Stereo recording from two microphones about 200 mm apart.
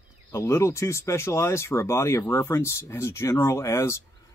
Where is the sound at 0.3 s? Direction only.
15° left (ahead or behind).